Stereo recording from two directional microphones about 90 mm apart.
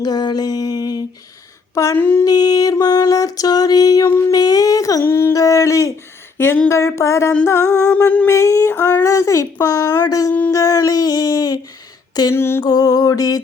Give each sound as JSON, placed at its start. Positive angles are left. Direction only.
{"t": 0.0, "sound": "music", "side_deg": 50}
{"t": 1.7, "sound": "a sound", "side_deg": 35}
{"t": 2.0, "sound": "speech", "side_deg": 25}
{"t": 2.2, "sound": "music", "side_deg": 45}
{"t": 4.3, "sound": "a sound", "side_deg": 45}
{"t": 5.3, "sound": "speech", "side_deg": 40}
{"t": 7.9, "sound": "a sound", "side_deg": 15}
{"t": 8.3, "sound": "speech", "side_deg": 35}
{"t": 8.7, "sound": "speech", "side_deg": 20}
{"t": 9.0, "sound": "speech", "side_deg": 35}
{"t": 12.3, "sound": "speech", "side_deg": 25}
{"t": 12.6, "sound": "music", "side_deg": 45}